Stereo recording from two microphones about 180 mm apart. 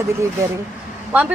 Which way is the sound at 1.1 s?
10° right (ahead or behind).